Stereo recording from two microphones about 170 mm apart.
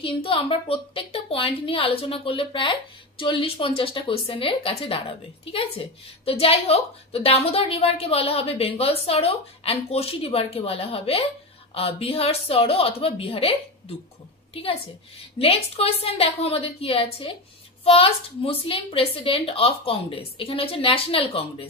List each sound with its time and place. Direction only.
0.0 s a woman's voice: 30° left (ahead or behind)